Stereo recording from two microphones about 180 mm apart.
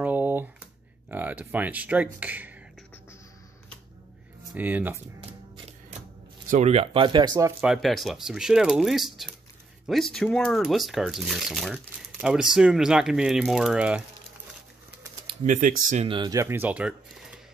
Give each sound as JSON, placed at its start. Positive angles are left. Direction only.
{"t": 0.0, "sound": "a sound", "side_deg": -10}
{"t": 1.0, "sound": "speech", "side_deg": -10}
{"t": 4.6, "sound": "speech", "side_deg": -10}
{"t": 6.5, "sound": "speech", "side_deg": -35}
{"t": 7.6, "sound": "speech", "side_deg": 0}
{"t": 15.4, "sound": "speech", "side_deg": -45}
{"t": 15.9, "sound": "speech", "side_deg": -30}